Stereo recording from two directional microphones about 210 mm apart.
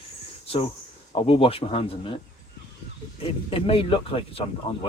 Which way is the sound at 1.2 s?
25° left (ahead or behind).